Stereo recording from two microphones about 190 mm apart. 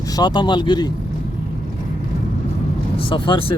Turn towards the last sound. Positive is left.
turn(degrees=25)  # may be behind; listen again after turning